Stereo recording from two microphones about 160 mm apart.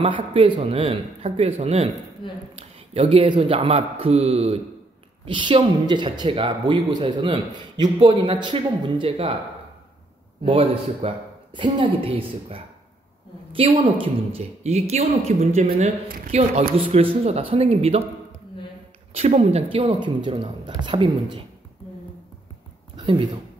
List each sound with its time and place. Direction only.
0.0 s speech: 35° right (ahead or behind)
10.4 s speech: 35° right (ahead or behind)
15.6 s speech: 60° right (ahead or behind); by 18.0 s 40° right (ahead or behind)
19.1 s speech: 40° right (ahead or behind)
22.9 s a sound: 35° right (ahead or behind)